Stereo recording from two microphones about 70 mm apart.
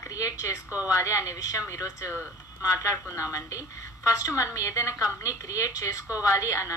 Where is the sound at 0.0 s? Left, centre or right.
Left.